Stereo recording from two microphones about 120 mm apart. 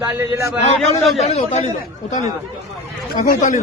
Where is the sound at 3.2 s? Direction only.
90° left.